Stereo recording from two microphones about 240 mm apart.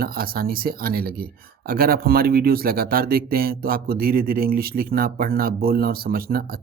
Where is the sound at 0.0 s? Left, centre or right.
Right.